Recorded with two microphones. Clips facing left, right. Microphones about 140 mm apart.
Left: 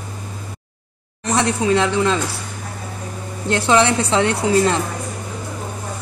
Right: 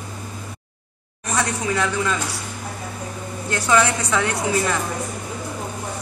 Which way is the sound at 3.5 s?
25° left (ahead or behind).